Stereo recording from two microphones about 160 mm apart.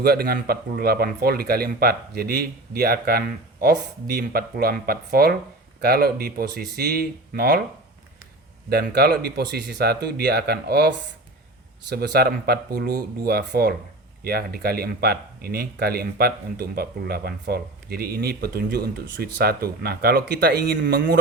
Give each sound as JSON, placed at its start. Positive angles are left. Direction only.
{"t": 0.0, "sound": "speech", "side_deg": -75}
{"t": 8.7, "sound": "speech", "side_deg": -85}